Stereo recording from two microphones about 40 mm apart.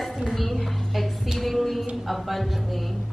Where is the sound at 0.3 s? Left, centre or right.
Centre.